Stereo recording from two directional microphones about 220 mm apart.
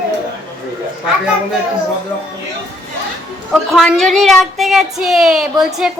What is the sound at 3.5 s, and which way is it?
A woman's voice, centre (ahead or behind).